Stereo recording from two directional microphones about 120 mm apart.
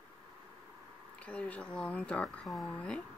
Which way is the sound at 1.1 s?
10° left (ahead or behind).